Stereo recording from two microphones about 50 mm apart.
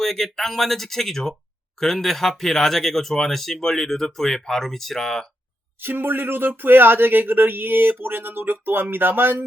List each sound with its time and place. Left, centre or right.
0.0 s speech: centre
5.8 s speech: right